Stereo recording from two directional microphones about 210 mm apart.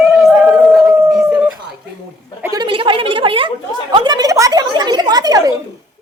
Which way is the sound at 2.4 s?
20° right (ahead or behind).